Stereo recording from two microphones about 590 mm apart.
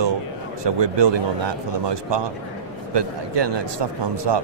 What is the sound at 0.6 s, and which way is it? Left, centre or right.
Speech, right.